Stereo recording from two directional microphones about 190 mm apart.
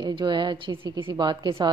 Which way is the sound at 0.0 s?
25° right (ahead or behind).